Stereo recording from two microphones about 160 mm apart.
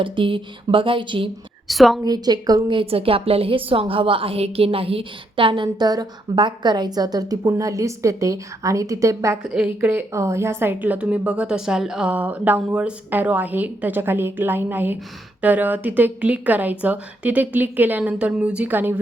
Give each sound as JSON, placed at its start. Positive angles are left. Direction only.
{"t": 0.0, "sound": "speech", "side_deg": -30}
{"t": 1.6, "sound": "a woman's voice", "side_deg": 0}
{"t": 2.0, "sound": "a woman's voice", "side_deg": -25}